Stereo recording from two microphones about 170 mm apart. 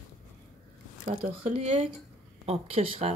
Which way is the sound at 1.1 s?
35° right (ahead or behind).